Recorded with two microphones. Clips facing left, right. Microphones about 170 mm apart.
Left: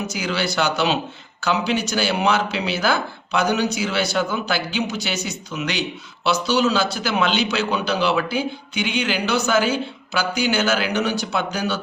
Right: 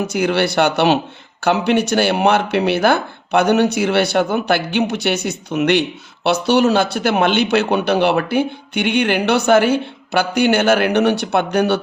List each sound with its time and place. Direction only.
0.1 s speech: 60° right (ahead or behind)